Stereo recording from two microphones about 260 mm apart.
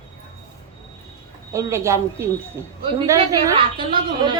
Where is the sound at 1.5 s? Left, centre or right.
Centre.